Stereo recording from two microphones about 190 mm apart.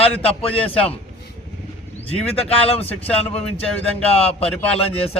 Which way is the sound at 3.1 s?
30° left (ahead or behind).